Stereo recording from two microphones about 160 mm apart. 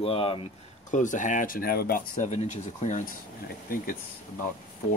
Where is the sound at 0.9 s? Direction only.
50° left (ahead or behind); by 2.0 s 70° left (ahead or behind).